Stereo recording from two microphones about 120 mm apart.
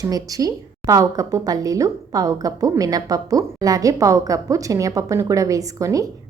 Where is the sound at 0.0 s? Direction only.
30° right (ahead or behind).